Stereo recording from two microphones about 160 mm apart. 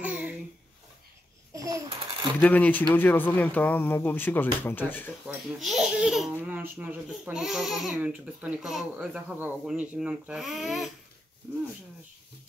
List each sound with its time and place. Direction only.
0.0 s babbling: 10° right (ahead or behind)
1.5 s babbling: 20° right (ahead or behind)
1.9 s a sound: 35° right (ahead or behind)
2.4 s speech: 10° left (ahead or behind)
5.6 s speech: centre (ahead or behind)